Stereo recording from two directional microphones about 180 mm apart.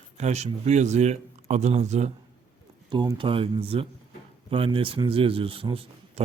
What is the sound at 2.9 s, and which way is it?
A man's voice, 25° right (ahead or behind).